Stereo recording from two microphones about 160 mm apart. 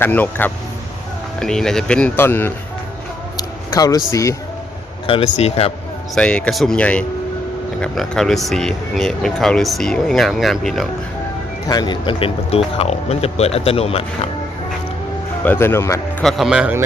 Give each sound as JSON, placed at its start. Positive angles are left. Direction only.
{"t": 0.0, "sound": "speech", "side_deg": 10}
{"t": 3.3, "sound": "a sound", "side_deg": 25}
{"t": 5.0, "sound": "speech", "side_deg": 40}
{"t": 6.1, "sound": "speech", "side_deg": 5}
{"t": 11.7, "sound": "speech", "side_deg": 25}
{"t": 15.4, "sound": "speech", "side_deg": 15}
{"t": 16.2, "sound": "speech", "side_deg": -5}